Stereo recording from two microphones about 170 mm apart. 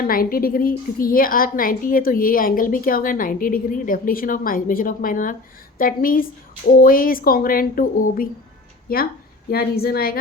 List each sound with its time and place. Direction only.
0.0 s a woman's voice: 60° left (ahead or behind)